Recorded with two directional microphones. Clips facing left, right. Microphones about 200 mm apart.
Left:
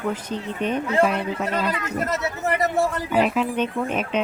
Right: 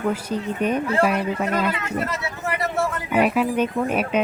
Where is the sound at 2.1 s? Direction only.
40° left (ahead or behind).